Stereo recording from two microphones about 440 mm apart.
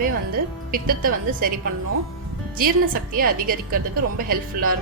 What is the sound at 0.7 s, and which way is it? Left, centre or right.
Speech, centre.